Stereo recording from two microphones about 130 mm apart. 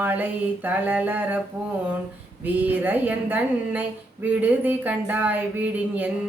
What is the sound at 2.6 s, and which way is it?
Speech, 15° right (ahead or behind).